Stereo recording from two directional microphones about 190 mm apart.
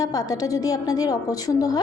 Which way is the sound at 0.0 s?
20° left (ahead or behind).